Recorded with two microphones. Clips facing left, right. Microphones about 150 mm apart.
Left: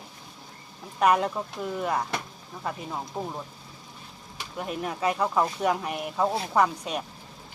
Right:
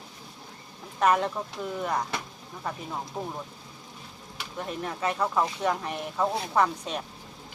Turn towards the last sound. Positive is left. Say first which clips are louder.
# left 1 dB
turn(degrees=10)  # may be behind; listen again after turning